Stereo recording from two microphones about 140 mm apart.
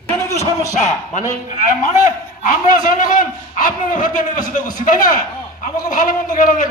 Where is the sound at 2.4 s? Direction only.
80° left.